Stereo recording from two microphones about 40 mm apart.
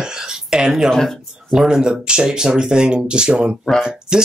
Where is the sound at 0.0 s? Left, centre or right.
Centre.